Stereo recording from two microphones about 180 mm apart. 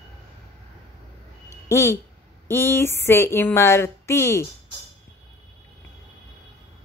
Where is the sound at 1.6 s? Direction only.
15° left (ahead or behind).